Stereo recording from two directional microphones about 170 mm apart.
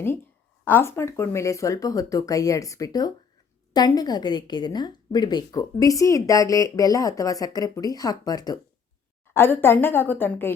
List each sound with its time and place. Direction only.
0.6 s a woman's voice: 10° left (ahead or behind)